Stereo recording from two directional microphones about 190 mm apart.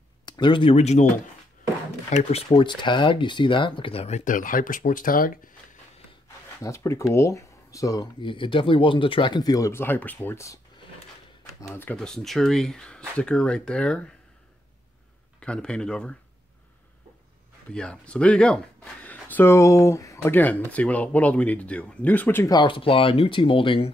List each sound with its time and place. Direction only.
0.2 s speech: 25° left (ahead or behind)
2.5 s speech: 25° left (ahead or behind); by 5.4 s 45° left (ahead or behind)
6.6 s speech: 15° left (ahead or behind)
15.4 s speech: 5° left (ahead or behind)
17.7 s speech: 5° left (ahead or behind); by 23.9 s 25° left (ahead or behind)